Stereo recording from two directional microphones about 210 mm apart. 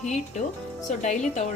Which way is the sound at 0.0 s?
35° left (ahead or behind).